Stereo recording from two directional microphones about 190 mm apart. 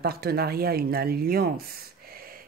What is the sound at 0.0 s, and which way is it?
Speech, 55° right (ahead or behind).